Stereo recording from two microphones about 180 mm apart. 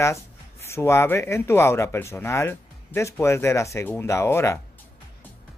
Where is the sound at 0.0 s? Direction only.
15° left (ahead or behind).